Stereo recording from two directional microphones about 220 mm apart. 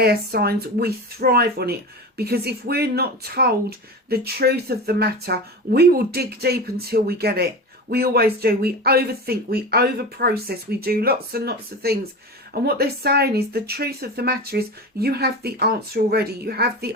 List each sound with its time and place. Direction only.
0.0 s speech: 45° right (ahead or behind)